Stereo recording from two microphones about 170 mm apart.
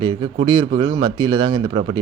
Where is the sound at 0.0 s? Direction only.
30° right (ahead or behind).